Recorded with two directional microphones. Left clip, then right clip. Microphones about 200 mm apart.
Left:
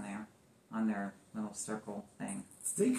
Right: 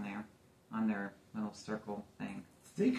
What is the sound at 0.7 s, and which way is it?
Speech, 5° right (ahead or behind).